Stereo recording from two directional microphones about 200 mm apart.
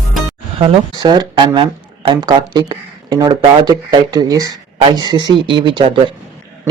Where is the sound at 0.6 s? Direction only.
25° right (ahead or behind).